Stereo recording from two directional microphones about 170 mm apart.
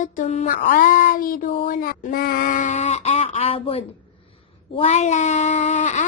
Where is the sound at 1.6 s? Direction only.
55° left (ahead or behind); by 3.9 s 35° left (ahead or behind).